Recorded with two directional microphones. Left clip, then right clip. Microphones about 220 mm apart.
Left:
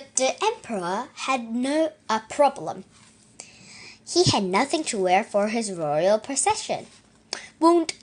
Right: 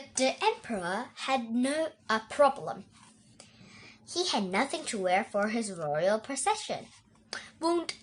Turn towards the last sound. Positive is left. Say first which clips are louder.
# left 11 dB
turn(degrees=20)  # may be behind; listen again after turning